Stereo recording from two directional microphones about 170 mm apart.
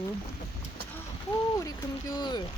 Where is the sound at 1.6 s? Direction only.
20° left (ahead or behind).